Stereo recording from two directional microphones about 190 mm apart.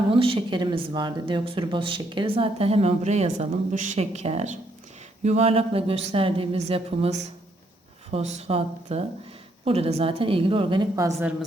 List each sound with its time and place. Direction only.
0.1 s speech: 30° right (ahead or behind)
11.1 s a woman's voice: 5° right (ahead or behind)